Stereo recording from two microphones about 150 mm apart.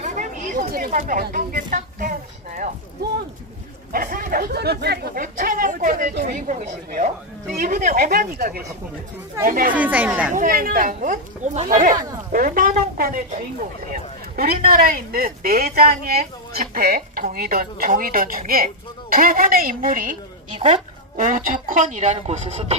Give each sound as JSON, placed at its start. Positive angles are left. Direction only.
{"t": 0.0, "sound": "a sound", "side_deg": -55}
{"t": 3.9, "sound": "speech", "side_deg": -70}
{"t": 7.6, "sound": "speech", "side_deg": -65}
{"t": 9.4, "sound": "speech", "side_deg": -70}
{"t": 9.8, "sound": "speech", "side_deg": -10}
{"t": 10.3, "sound": "speech", "side_deg": -70}
{"t": 20.5, "sound": "speech", "side_deg": -35}
{"t": 21.2, "sound": "speech", "side_deg": -60}